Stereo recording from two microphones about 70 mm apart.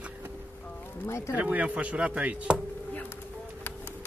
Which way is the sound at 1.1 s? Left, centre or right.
Left.